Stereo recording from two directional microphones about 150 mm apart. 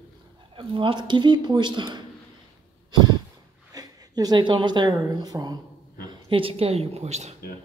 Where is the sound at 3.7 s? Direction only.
25° right (ahead or behind).